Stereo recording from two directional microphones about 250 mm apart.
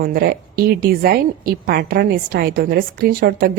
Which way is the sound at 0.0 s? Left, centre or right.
Right.